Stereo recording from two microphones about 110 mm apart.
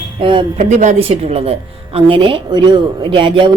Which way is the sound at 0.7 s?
90° right.